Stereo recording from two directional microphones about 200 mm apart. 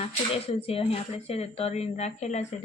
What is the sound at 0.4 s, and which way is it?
A woman's voice, 30° left (ahead or behind).